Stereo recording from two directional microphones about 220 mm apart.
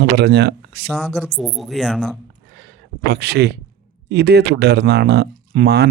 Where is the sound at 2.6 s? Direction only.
50° right (ahead or behind).